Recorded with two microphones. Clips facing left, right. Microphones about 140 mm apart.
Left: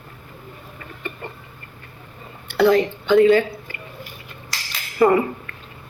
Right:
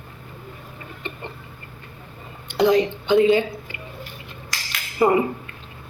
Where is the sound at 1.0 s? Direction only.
20° right (ahead or behind).